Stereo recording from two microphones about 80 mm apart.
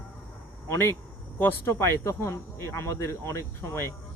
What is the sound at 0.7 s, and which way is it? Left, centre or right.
Speech, left.